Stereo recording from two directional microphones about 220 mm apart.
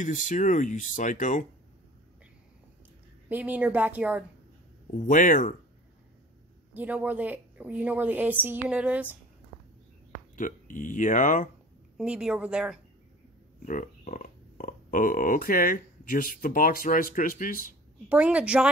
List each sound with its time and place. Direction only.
0.0 s speech: 35° left (ahead or behind)
3.3 s a woman's voice: 10° right (ahead or behind)
5.0 s speech: 35° left (ahead or behind)
6.7 s a woman's voice: 5° right (ahead or behind)
10.3 s speech: 35° left (ahead or behind)
12.0 s speech: 5° right (ahead or behind)
13.7 s speech: 35° left (ahead or behind)
18.0 s speech: 5° right (ahead or behind)